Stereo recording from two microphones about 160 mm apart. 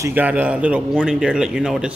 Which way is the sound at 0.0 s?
10° right (ahead or behind).